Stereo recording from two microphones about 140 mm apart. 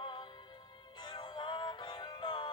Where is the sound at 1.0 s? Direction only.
30° left (ahead or behind).